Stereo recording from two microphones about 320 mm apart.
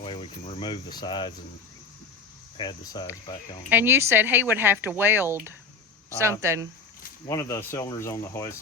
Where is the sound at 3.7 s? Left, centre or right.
Centre.